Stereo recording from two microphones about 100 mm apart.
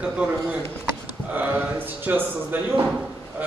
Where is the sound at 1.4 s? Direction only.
20° right (ahead or behind).